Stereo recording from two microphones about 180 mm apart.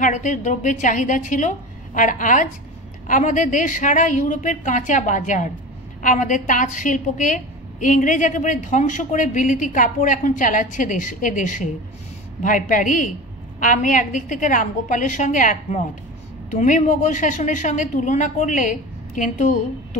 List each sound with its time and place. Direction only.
0.0 s a woman's voice: 45° left (ahead or behind)